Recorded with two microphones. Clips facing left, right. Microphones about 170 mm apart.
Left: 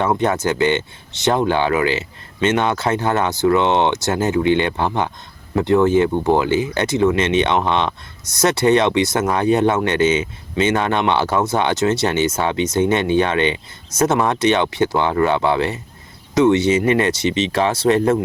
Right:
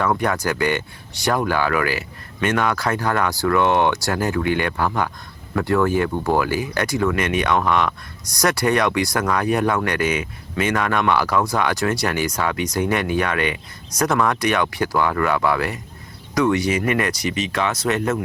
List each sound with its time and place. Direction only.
0.0 s speech: 25° left (ahead or behind)